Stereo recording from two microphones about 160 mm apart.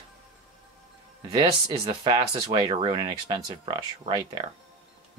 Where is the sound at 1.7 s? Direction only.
35° right (ahead or behind).